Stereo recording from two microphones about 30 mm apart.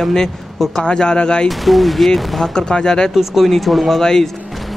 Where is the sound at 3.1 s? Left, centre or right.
Centre.